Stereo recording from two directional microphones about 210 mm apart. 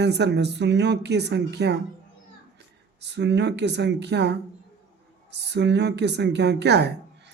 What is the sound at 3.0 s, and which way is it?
A woman's voice, 55° right (ahead or behind).